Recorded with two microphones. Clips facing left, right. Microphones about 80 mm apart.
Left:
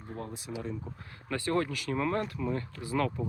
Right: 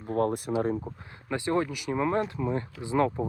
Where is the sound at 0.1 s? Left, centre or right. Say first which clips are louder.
Right 14 dB; right.